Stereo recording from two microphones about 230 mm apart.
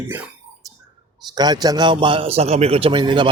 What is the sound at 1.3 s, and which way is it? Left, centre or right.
A man's voice, centre.